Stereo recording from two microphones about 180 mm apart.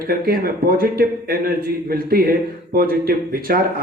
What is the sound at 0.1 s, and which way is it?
A man's voice, 55° right (ahead or behind).